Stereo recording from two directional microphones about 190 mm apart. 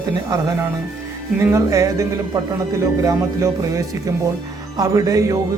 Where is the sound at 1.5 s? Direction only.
15° right (ahead or behind).